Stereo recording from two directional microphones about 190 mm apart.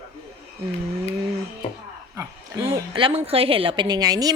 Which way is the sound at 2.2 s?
15° right (ahead or behind).